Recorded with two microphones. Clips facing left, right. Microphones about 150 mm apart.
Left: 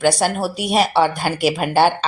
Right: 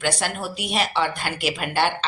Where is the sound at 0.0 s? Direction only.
40° left (ahead or behind).